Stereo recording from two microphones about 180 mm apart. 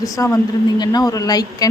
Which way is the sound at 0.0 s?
20° left (ahead or behind).